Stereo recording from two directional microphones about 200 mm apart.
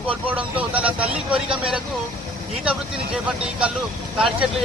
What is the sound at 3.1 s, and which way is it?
Speech, 5° right (ahead or behind).